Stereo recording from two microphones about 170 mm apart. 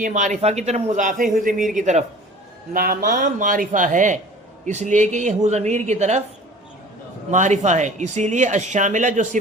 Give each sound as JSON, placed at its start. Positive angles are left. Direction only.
{"t": 0.0, "sound": "speech", "side_deg": -45}
{"t": 2.7, "sound": "speech", "side_deg": -60}
{"t": 7.3, "sound": "speech", "side_deg": -45}